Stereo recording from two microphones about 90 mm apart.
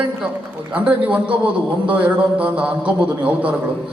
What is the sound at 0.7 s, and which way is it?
A man's voice, 15° right (ahead or behind).